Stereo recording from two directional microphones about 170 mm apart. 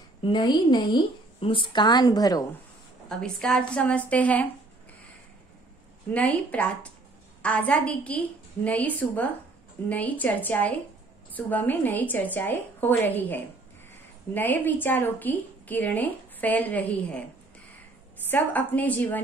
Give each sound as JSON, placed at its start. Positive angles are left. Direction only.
{"t": 0.2, "sound": "a woman's voice", "side_deg": 25}
{"t": 3.1, "sound": "a woman's voice", "side_deg": 5}
{"t": 6.1, "sound": "a woman's voice", "side_deg": 10}
{"t": 18.3, "sound": "a woman's voice", "side_deg": 10}